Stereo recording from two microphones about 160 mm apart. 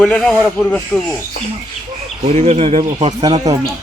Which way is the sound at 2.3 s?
45° right (ahead or behind).